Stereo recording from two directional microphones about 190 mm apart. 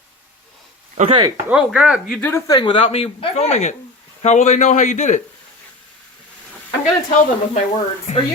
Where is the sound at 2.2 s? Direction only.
15° left (ahead or behind); by 5.2 s 40° left (ahead or behind).